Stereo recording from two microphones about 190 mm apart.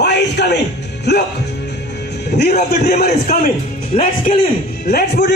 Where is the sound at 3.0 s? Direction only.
55° left (ahead or behind).